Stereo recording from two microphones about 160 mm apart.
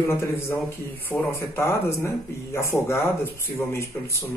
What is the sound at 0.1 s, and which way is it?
A man's voice, 15° left (ahead or behind).